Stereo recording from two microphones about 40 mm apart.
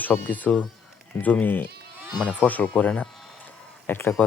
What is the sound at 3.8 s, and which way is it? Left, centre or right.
Speech, left.